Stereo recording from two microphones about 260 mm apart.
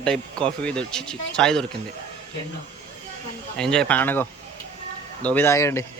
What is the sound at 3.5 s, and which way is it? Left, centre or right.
Speech, centre.